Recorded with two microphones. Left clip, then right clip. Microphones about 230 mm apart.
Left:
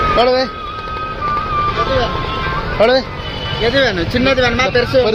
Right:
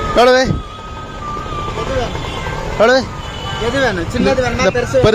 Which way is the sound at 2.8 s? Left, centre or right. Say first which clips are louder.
Right 1 dB; centre.